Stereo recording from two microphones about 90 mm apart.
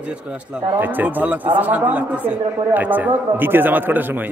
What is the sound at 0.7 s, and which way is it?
A man's voice, 20° right (ahead or behind).